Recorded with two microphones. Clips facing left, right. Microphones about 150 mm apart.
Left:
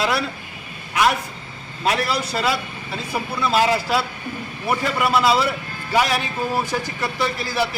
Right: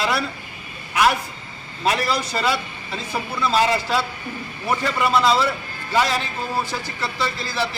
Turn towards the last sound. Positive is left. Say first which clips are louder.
# left 2 dB
turn(degrees=10)  # may be behind; listen again after turning